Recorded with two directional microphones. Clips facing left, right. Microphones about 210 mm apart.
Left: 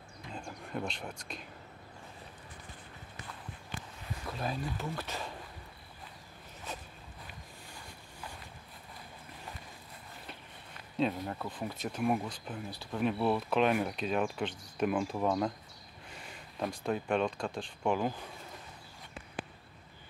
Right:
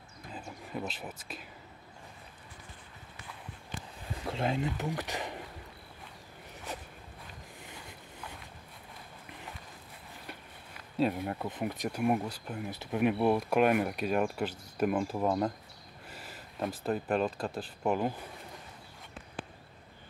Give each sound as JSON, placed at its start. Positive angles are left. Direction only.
{"t": 0.3, "sound": "a sound", "side_deg": -5}
{"t": 4.2, "sound": "speech", "side_deg": -25}
{"t": 11.0, "sound": "speech", "side_deg": -5}
{"t": 11.3, "sound": "speech", "side_deg": -20}